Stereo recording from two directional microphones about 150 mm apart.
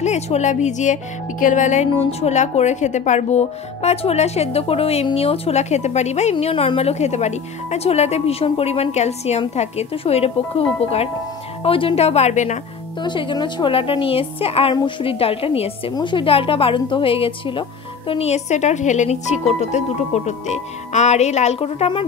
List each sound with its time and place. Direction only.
0.0 s a woman's voice: 50° left (ahead or behind)
6.4 s a woman's voice: 40° left (ahead or behind)
13.0 s a woman's voice: 30° left (ahead or behind)